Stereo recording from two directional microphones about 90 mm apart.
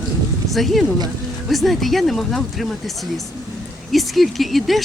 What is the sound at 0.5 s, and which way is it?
Speech, centre (ahead or behind).